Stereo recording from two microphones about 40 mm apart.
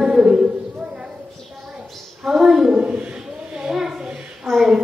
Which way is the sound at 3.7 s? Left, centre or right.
Centre.